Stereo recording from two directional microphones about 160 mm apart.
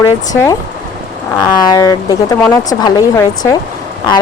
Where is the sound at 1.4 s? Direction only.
25° left (ahead or behind).